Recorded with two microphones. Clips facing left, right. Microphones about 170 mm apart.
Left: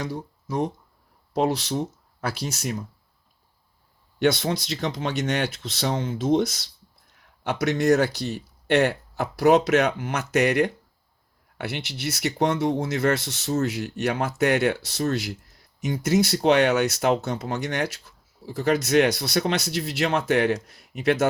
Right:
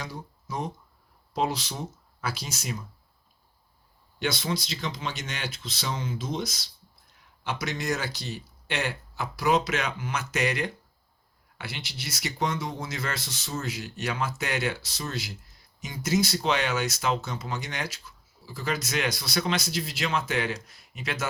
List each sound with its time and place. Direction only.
0.0 s speech: 65° left (ahead or behind)
4.2 s speech: 60° left (ahead or behind)